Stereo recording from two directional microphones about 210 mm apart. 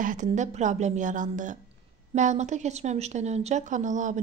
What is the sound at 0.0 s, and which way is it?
A woman's voice, 35° right (ahead or behind).